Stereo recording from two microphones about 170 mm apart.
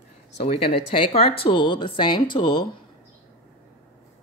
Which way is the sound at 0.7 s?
35° left (ahead or behind).